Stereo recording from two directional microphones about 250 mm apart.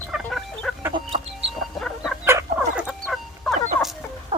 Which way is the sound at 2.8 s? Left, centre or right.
Centre.